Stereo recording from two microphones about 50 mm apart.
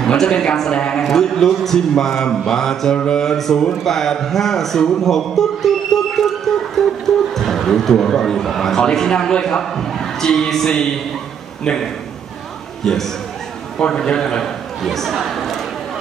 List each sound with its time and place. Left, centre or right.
0.1 s a man's voice: centre
1.0 s a man's voice: centre
12.8 s speech: centre
13.7 s speech: centre
14.4 s a man's voice: centre